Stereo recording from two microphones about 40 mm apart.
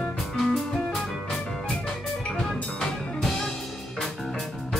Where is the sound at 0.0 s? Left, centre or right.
Centre.